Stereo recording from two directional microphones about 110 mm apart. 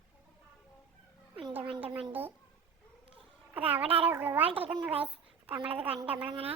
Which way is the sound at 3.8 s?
60° right (ahead or behind).